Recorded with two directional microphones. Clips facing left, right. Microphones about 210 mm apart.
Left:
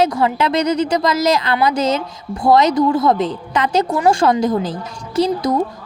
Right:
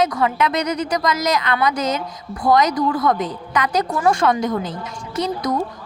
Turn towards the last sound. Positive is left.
turn(degrees=30)  # may be behind; listen again after turning